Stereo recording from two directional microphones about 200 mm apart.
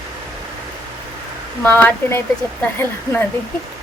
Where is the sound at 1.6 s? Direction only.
10° left (ahead or behind).